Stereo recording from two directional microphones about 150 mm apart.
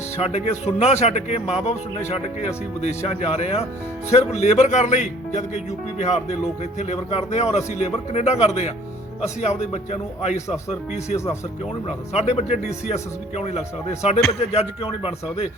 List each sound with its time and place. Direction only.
0.2 s speech: 45° left (ahead or behind)
2.8 s speech: 45° left (ahead or behind)